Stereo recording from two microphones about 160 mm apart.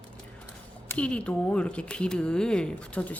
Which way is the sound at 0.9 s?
5° left (ahead or behind).